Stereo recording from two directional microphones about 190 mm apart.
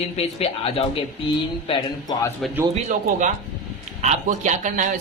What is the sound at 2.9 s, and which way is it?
A man's voice, 40° right (ahead or behind).